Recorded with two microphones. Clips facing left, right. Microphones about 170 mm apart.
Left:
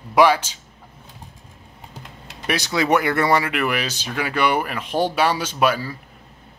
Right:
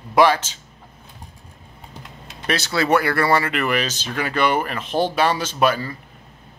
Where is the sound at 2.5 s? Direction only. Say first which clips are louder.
Even; 15° left (ahead or behind).